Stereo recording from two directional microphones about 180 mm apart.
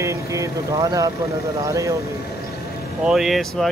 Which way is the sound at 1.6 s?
15° right (ahead or behind).